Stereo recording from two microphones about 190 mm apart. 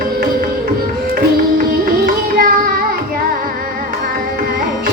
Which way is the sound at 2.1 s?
50° right (ahead or behind).